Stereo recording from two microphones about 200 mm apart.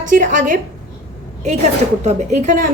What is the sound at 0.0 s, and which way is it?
A woman's voice, 40° right (ahead or behind).